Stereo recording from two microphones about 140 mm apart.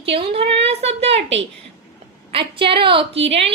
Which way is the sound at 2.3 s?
40° right (ahead or behind).